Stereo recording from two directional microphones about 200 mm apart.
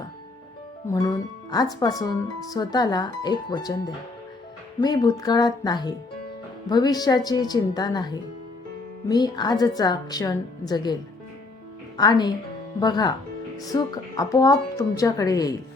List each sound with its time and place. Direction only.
0.9 s speech: 15° left (ahead or behind)
11.9 s speech: 20° left (ahead or behind)